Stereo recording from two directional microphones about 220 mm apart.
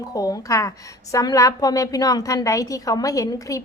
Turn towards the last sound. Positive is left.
turn(degrees=15)  # may be behind; listen again after turning